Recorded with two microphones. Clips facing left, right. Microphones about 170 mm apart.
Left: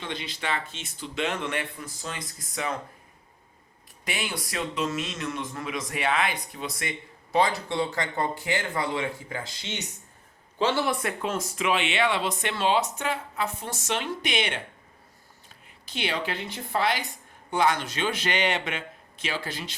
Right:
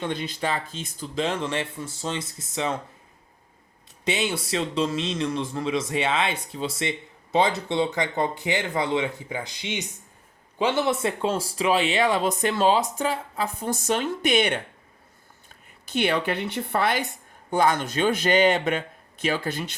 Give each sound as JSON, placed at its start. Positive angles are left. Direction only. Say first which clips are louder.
{"t": 0.0, "sound": "speech", "louder": "right 6 dB", "side_deg": -50}
{"t": 0.3, "sound": "speech", "louder": "right 4 dB", "side_deg": -35}
{"t": 4.0, "sound": "speech", "louder": "right 7 dB", "side_deg": -25}
{"t": 13.9, "sound": "speech", "louder": "right 6 dB", "side_deg": -45}
{"t": 15.9, "sound": "speech", "louder": "right 6 dB", "side_deg": -55}
{"t": 17.6, "sound": "speech", "louder": "right 3 dB", "side_deg": -45}